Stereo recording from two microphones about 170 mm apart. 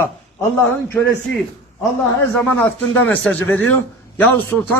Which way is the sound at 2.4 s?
10° left (ahead or behind).